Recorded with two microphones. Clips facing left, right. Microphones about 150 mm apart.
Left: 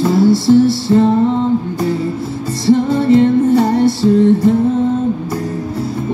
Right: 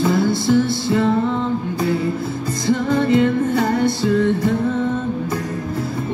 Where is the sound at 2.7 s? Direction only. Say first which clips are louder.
Left 6 dB; 35° left (ahead or behind).